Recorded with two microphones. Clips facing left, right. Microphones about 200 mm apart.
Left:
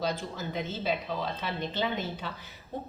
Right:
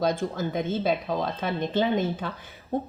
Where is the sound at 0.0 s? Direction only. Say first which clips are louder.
Right 7 dB; 50° right (ahead or behind).